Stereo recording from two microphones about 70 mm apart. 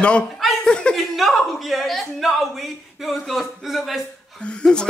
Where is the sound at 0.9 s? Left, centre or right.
Centre.